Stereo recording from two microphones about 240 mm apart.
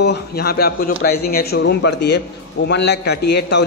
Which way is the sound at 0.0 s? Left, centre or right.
Left.